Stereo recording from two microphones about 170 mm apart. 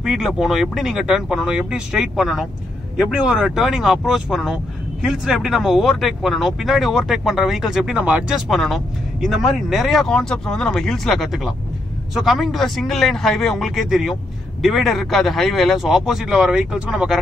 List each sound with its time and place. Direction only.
0.0 s speech: centre (ahead or behind)